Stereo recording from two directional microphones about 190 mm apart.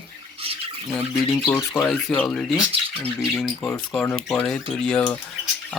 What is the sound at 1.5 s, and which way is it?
Speech, 5° left (ahead or behind).